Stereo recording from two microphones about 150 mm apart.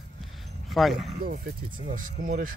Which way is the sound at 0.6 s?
Centre (ahead or behind).